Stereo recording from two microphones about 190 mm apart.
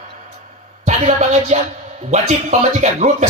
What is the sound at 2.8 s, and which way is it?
Music, 40° right (ahead or behind).